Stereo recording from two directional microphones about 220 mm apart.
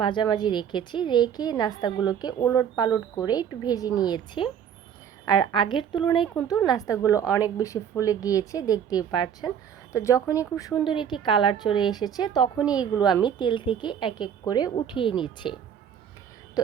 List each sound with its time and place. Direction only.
0.0 s a woman's voice: 20° left (ahead or behind)